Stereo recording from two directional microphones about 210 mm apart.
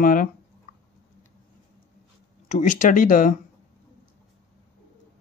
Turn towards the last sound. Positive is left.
turn(degrees=40)  # may be behind; listen again after turning